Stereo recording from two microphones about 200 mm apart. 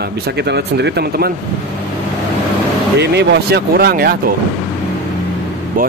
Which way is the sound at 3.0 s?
55° right (ahead or behind).